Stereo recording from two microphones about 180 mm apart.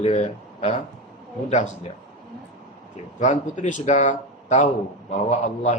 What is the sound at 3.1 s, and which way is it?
A man's voice, 45° left (ahead or behind).